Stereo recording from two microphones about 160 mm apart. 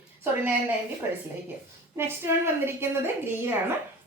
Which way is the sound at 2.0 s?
15° right (ahead or behind).